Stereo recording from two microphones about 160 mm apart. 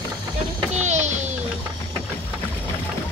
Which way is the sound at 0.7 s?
45° right (ahead or behind).